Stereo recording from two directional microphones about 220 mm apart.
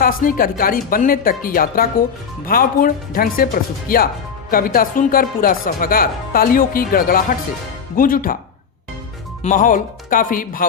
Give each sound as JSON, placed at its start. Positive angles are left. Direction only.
{"t": 0.0, "sound": "speech", "side_deg": 40}
{"t": 9.4, "sound": "speech", "side_deg": 35}